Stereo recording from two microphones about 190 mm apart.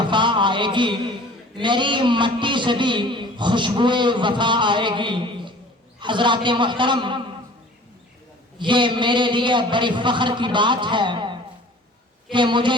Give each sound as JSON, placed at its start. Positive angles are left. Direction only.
{"t": 0.0, "sound": "a man's voice", "side_deg": -25}
{"t": 8.5, "sound": "a man's voice", "side_deg": -25}